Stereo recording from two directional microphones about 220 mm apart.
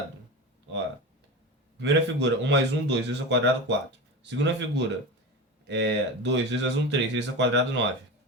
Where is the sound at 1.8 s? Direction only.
55° right (ahead or behind).